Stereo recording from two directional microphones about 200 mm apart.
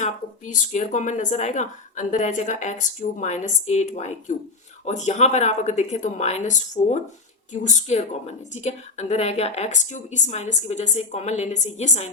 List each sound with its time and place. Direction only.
0.0 s a woman's voice: 35° left (ahead or behind)